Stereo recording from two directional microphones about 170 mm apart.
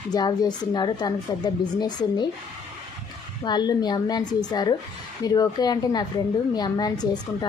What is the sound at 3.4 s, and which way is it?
A woman's voice, 25° left (ahead or behind).